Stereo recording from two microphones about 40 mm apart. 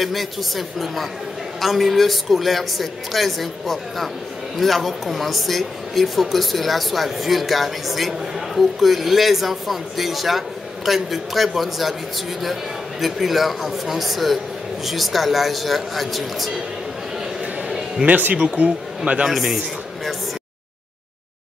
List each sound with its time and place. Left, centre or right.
0.0 s speech: centre
13.0 s speech: centre
18.3 s speech: right
19.2 s speech: centre